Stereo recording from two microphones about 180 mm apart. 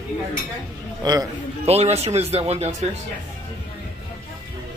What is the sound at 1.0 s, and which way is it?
Speech, 20° right (ahead or behind).